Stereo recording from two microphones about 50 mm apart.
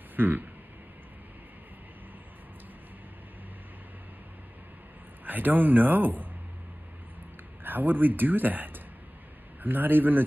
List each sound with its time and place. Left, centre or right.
0.1 s a sound: right
5.2 s speech: right
7.6 s speech: right